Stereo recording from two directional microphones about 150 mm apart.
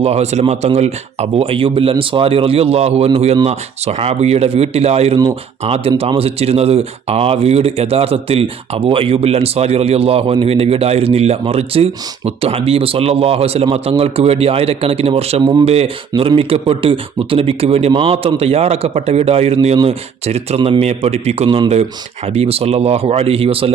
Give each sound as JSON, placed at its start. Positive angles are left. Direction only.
{"t": 0.0, "sound": "speech", "side_deg": -45}